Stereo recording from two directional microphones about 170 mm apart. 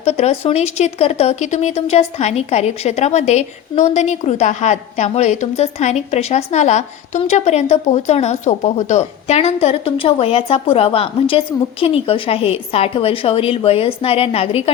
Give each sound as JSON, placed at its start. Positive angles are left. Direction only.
{"t": 0.0, "sound": "speech", "side_deg": 40}